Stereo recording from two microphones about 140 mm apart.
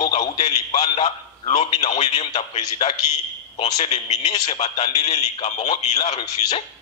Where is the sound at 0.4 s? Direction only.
50° left (ahead or behind).